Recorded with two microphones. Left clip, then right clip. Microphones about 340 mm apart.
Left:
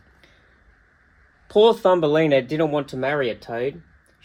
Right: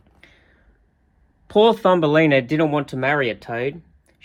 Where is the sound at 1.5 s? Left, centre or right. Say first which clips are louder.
Right 1 dB; right.